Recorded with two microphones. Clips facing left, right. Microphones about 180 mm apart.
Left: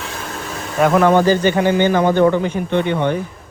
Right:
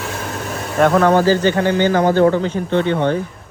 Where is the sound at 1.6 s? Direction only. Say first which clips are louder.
Even; 15° left (ahead or behind).